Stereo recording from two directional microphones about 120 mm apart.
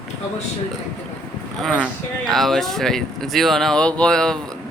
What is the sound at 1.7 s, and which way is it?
Speech, centre (ahead or behind).